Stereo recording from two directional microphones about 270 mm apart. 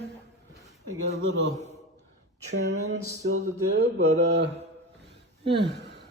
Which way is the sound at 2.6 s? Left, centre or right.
Right.